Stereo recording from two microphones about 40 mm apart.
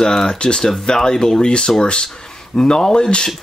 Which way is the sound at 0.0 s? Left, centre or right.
Centre.